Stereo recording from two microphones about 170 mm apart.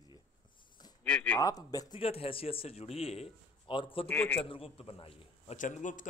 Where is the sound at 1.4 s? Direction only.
20° left (ahead or behind).